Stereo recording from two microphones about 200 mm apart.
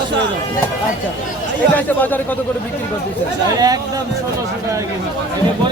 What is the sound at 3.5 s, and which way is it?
Speech, 20° right (ahead or behind).